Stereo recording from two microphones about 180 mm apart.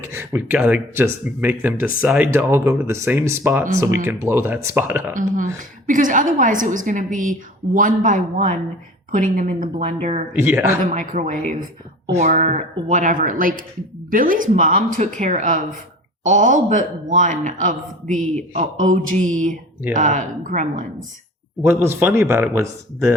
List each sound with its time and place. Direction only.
0.0 s speech: 15° right (ahead or behind)
5.9 s a woman's voice: 45° right (ahead or behind)
9.8 s speech: 35° right (ahead or behind)
10.4 s speech: 15° right (ahead or behind)
10.9 s a woman's voice: 45° right (ahead or behind)
21.6 s speech: 10° right (ahead or behind)